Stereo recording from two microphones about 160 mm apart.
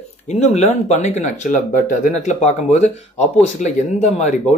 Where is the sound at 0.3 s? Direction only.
45° left (ahead or behind).